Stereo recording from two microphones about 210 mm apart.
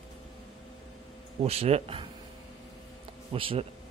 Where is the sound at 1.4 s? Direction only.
30° right (ahead or behind).